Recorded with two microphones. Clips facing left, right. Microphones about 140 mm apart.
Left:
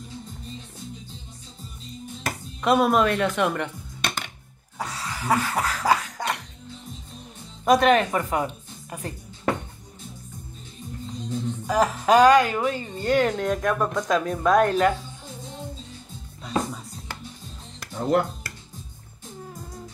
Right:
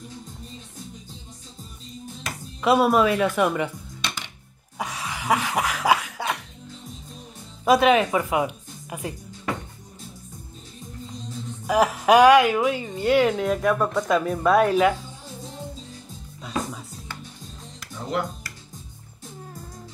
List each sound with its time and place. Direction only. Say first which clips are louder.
2.6 s speech: right 1 dB; 5° right (ahead or behind)
4.0 s music: left 3 dB; 50° left (ahead or behind)
4.7 s dog: right 1 dB; 15° right (ahead or behind)
7.6 s a woman's voice: even; 5° right (ahead or behind)
11.6 s a woman's voice: right 3 dB; 10° right (ahead or behind)
17.7 s music: left 6 dB; 50° left (ahead or behind)